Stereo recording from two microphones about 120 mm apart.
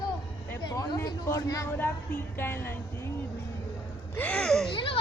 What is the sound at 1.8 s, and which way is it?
Speech, 15° left (ahead or behind).